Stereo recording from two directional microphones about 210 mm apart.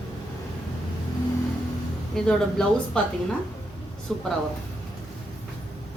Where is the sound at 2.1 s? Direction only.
5° left (ahead or behind).